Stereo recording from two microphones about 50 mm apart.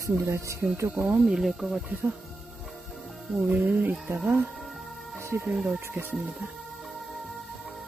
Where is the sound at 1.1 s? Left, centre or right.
Centre.